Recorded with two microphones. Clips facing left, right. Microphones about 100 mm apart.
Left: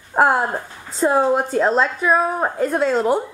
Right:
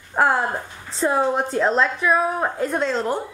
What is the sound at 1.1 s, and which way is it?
A woman's voice, centre (ahead or behind).